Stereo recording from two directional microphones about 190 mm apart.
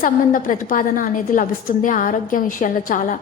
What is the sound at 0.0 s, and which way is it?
A woman's voice, 45° left (ahead or behind).